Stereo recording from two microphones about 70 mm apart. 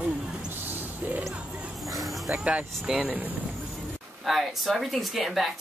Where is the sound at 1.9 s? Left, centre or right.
Centre.